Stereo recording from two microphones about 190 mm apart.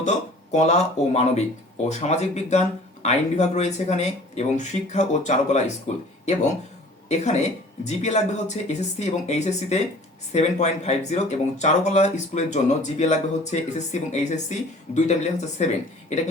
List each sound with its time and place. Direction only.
0.0 s speech: 40° left (ahead or behind)
7.1 s speech: 35° left (ahead or behind)